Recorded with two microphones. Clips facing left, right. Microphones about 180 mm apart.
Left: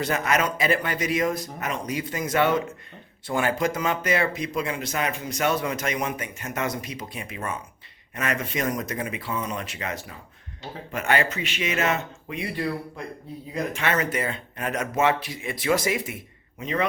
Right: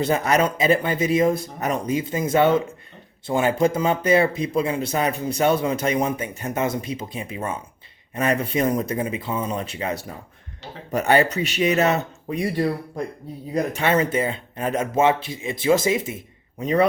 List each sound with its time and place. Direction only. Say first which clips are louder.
0.0 s speech: right 5 dB; 30° right (ahead or behind)
10.9 s speech: right 6 dB; 35° right (ahead or behind)
16.6 s speech: right 7 dB; 35° right (ahead or behind)